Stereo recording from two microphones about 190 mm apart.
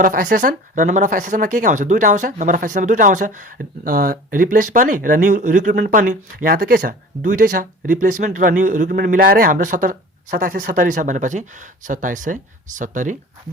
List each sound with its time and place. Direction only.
0.0 s speech: 45° right (ahead or behind)